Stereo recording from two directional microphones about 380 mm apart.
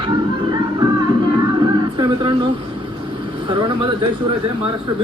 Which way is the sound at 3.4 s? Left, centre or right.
Centre.